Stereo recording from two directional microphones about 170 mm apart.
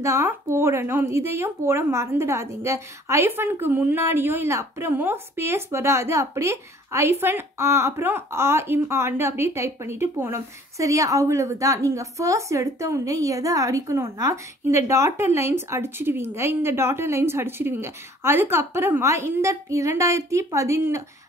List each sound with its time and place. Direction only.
0.0 s speech: 20° right (ahead or behind)